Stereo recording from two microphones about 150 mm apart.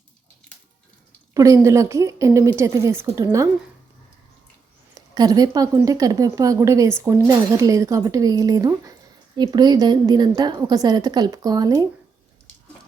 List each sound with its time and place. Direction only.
1.3 s a woman's voice: 20° right (ahead or behind)
4.9 s a woman's voice: 25° right (ahead or behind)